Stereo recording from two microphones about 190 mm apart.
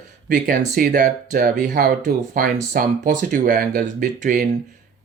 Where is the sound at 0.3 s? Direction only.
50° right (ahead or behind).